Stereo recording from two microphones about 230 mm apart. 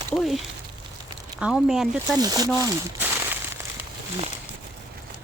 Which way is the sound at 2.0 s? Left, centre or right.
Centre.